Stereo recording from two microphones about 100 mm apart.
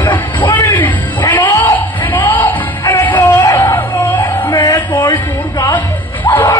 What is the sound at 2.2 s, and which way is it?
Music, 15° left (ahead or behind).